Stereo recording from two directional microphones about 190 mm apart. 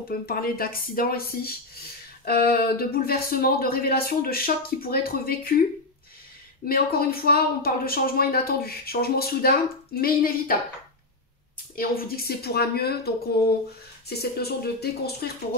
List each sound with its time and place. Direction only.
0.3 s speech: 50° left (ahead or behind)
6.7 s speech: 50° left (ahead or behind)
11.7 s speech: 50° left (ahead or behind)